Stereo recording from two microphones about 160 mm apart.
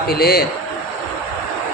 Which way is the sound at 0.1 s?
75° left (ahead or behind).